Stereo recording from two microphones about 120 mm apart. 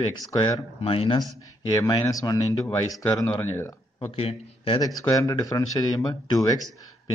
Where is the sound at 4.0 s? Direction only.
55° left (ahead or behind).